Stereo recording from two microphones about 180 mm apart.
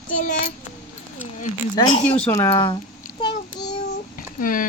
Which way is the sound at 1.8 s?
20° left (ahead or behind).